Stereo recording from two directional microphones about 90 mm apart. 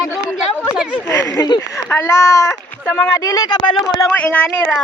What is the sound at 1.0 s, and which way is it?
Speech, 30° left (ahead or behind).